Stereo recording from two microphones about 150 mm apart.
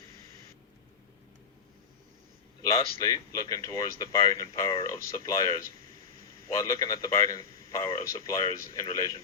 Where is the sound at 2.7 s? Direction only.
25° left (ahead or behind).